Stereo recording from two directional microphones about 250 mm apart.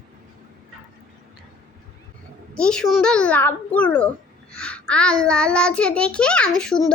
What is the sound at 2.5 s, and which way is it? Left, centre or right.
A child's voice, centre.